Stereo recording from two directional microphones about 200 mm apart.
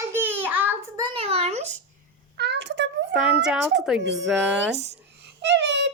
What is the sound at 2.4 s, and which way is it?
Speech, 60° right (ahead or behind).